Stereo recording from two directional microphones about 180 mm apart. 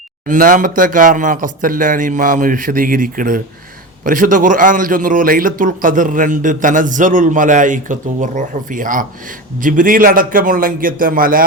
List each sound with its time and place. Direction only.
0.3 s a man's voice: 50° right (ahead or behind)